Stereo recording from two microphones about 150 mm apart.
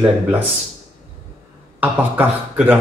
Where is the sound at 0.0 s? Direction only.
10° right (ahead or behind).